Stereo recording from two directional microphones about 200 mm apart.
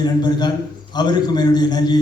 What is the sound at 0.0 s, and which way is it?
A man's voice, 20° left (ahead or behind).